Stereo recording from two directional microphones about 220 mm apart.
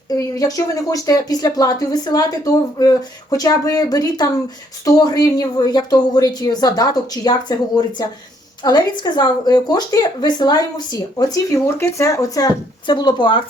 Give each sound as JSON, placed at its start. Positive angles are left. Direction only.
{"t": 0.1, "sound": "speech", "side_deg": 15}